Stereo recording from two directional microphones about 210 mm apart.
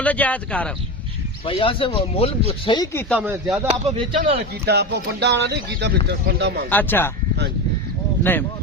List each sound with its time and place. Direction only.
0.0 s speech: 5° left (ahead or behind)
1.5 s speech: 25° left (ahead or behind)
3.2 s speech: 5° right (ahead or behind)
3.7 s speech: 25° right (ahead or behind)
4.6 s speech: 50° right (ahead or behind)
6.7 s speech: 10° left (ahead or behind)
8.2 s speech: 10° left (ahead or behind)